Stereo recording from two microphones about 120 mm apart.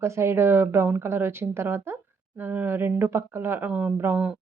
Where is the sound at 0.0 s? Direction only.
20° right (ahead or behind).